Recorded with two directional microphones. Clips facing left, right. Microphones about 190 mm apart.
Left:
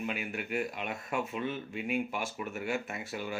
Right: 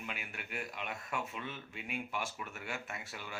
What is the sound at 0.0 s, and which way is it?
Speech, 20° left (ahead or behind).